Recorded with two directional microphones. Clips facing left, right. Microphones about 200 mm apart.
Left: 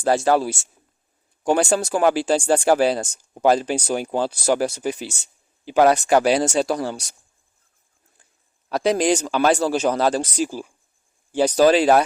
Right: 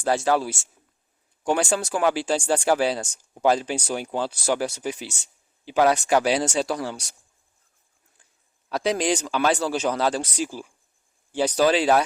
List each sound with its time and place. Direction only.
0.0 s speech: 40° left (ahead or behind)
8.7 s speech: 45° left (ahead or behind)